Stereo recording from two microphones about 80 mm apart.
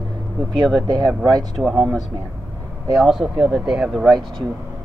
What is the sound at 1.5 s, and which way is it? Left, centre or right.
Speech, centre.